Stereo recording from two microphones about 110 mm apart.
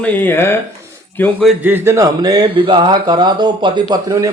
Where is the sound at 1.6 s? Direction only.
15° right (ahead or behind); by 2.5 s 35° right (ahead or behind).